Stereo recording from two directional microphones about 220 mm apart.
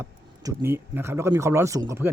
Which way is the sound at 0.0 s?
10° right (ahead or behind).